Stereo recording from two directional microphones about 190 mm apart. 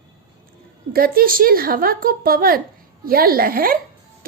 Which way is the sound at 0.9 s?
50° right (ahead or behind).